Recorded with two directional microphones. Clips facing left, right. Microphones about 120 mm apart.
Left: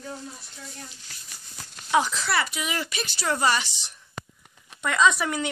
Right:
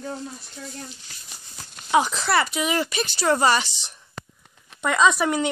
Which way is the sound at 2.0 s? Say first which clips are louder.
Right 4 dB; 40° right (ahead or behind).